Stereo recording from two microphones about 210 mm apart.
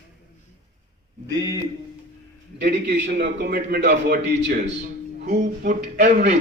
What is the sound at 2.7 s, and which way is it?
A man's voice, 55° right (ahead or behind).